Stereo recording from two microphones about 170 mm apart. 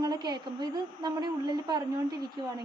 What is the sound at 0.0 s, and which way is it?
A woman's voice, 25° right (ahead or behind).